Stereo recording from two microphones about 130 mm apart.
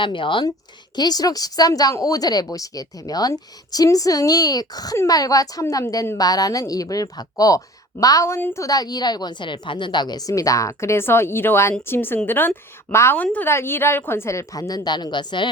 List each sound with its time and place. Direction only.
0.0 s speech: 40° left (ahead or behind); by 8.6 s 20° left (ahead or behind)
8.6 s a woman's voice: 30° left (ahead or behind)